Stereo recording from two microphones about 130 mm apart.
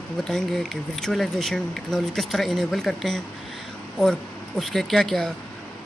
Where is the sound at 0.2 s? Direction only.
5° left (ahead or behind).